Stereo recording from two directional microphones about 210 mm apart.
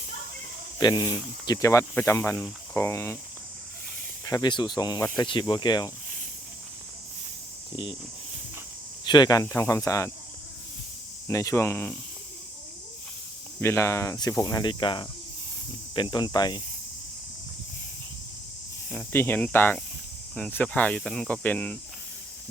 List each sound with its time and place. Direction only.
0.8 s speech: 20° left (ahead or behind)
4.3 s speech: 20° left (ahead or behind)
9.0 s speech: 20° left (ahead or behind)
11.3 s speech: 15° left (ahead or behind)
13.6 s speech: 10° left (ahead or behind)
18.9 s speech: 10° left (ahead or behind)